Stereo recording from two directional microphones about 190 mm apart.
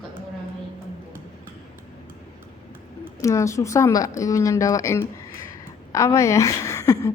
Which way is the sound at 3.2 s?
15° left (ahead or behind).